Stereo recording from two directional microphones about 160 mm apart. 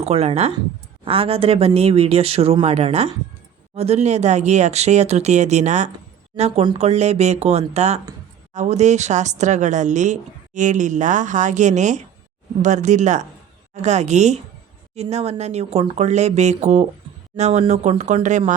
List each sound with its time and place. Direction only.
0.0 s a woman's voice: 40° right (ahead or behind)